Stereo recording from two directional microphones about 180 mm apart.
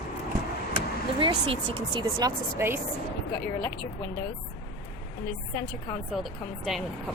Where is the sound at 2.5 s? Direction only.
15° right (ahead or behind).